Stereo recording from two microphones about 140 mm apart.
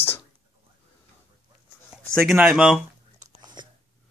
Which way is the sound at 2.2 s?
5° right (ahead or behind).